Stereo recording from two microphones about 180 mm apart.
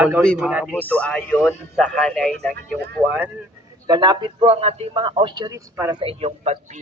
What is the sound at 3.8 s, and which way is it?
A man's voice, 25° right (ahead or behind).